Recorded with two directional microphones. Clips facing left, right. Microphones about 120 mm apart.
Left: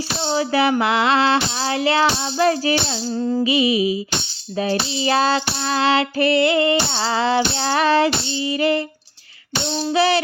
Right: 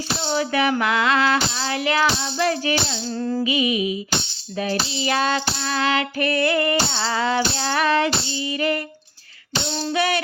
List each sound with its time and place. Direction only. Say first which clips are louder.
0.2 s a sound: left 3 dB; 30° left (ahead or behind)
0.8 s music: left 2 dB; 30° left (ahead or behind)
3.1 s music: left 4 dB; 20° left (ahead or behind)
3.4 s music: left 5 dB; 30° left (ahead or behind)
4.5 s child singing: left 3 dB; 30° left (ahead or behind)
9.9 s music: left 5 dB; 30° left (ahead or behind)